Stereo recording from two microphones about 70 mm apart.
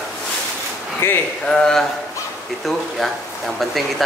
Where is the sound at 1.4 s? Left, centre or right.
Centre.